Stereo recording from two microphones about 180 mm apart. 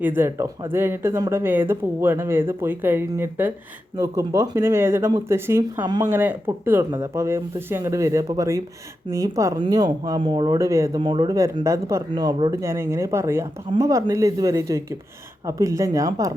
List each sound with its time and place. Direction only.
0.0 s speech: 10° right (ahead or behind)